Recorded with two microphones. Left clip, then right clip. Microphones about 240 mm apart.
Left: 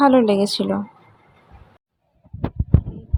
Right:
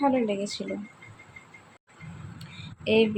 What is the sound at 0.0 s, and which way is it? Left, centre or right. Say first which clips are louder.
Speech: left 11 dB; left.